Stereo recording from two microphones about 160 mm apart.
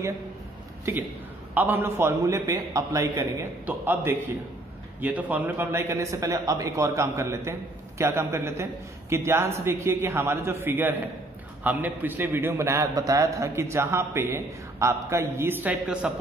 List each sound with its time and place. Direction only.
1.5 s a man's voice: 10° right (ahead or behind)